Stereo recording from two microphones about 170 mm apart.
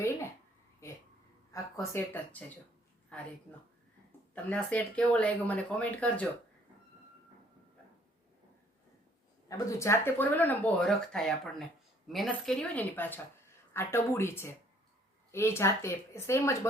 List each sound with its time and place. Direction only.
1.5 s speech: 20° left (ahead or behind)
4.4 s speech: 10° left (ahead or behind)
9.5 s speech: 15° left (ahead or behind)